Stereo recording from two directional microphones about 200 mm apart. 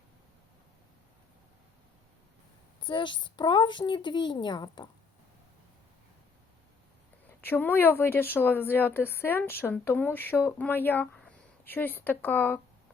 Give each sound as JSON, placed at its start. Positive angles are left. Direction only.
{"t": 2.8, "sound": "speech", "side_deg": 25}
{"t": 7.4, "sound": "speech", "side_deg": 10}